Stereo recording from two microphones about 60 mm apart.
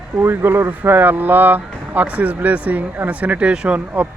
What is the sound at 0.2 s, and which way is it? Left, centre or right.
Speech, right.